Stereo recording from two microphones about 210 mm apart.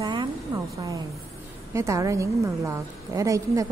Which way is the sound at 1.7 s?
15° right (ahead or behind).